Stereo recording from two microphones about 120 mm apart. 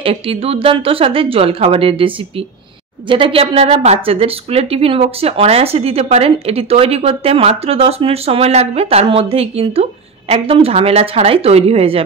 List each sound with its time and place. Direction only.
0.0 s a woman's voice: 50° right (ahead or behind)